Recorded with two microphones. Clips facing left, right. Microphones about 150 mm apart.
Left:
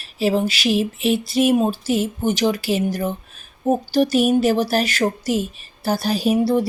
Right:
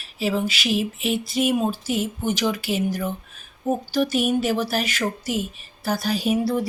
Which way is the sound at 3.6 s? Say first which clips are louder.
Left 5 dB; 35° left (ahead or behind).